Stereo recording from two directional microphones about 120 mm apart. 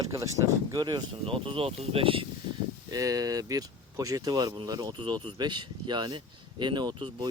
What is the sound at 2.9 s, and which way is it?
Speech, 30° right (ahead or behind).